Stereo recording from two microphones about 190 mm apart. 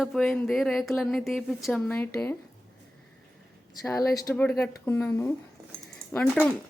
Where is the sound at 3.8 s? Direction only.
15° left (ahead or behind).